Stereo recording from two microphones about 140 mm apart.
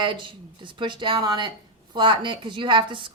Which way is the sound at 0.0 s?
35° right (ahead or behind).